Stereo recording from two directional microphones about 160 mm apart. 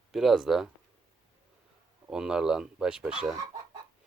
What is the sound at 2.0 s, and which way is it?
Speech, 5° right (ahead or behind).